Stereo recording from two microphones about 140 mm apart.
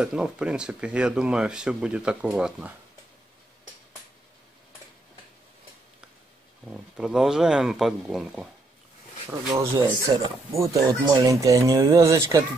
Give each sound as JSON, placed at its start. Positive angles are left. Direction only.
{"t": 0.0, "sound": "speech", "side_deg": -5}
{"t": 6.7, "sound": "speech", "side_deg": -5}
{"t": 9.8, "sound": "speech", "side_deg": -40}
{"t": 10.6, "sound": "speech", "side_deg": -25}